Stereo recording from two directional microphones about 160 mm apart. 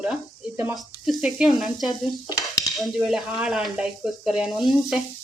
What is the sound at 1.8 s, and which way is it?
Stir, 25° left (ahead or behind).